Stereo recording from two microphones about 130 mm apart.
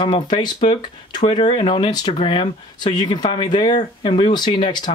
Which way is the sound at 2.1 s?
40° left (ahead or behind).